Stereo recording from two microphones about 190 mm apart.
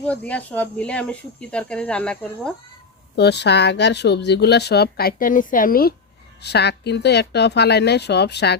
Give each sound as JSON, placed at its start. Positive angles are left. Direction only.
{"t": 0.0, "sound": "speech", "side_deg": 5}
{"t": 3.2, "sound": "speech", "side_deg": 60}
{"t": 6.4, "sound": "speech", "side_deg": 60}